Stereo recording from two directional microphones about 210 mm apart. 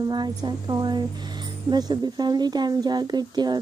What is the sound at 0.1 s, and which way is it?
Speech, 20° right (ahead or behind).